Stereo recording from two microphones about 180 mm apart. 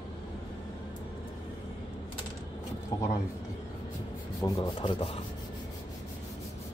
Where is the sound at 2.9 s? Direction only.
20° left (ahead or behind).